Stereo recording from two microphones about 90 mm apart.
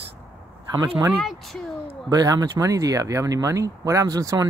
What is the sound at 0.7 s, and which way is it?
Speech, 45° right (ahead or behind).